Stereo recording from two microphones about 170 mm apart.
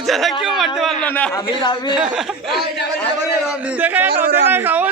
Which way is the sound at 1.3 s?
25° left (ahead or behind).